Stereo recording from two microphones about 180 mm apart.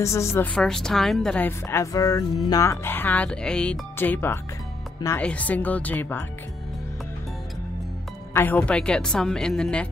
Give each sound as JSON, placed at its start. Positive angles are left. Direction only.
{"t": 0.0, "sound": "a woman's voice", "side_deg": 15}
{"t": 0.6, "sound": "a woman's voice", "side_deg": 5}
{"t": 8.3, "sound": "speech", "side_deg": 10}